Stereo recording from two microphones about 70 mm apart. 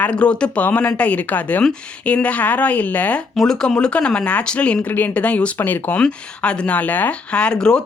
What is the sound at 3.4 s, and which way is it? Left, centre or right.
Speech, centre.